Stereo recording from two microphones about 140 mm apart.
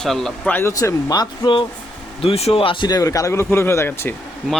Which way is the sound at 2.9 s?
25° left (ahead or behind).